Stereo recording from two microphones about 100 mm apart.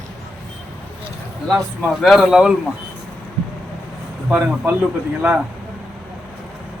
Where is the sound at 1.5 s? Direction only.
Centre (ahead or behind).